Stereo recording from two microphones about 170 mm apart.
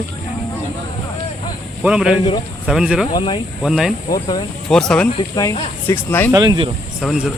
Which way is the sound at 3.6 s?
5° right (ahead or behind).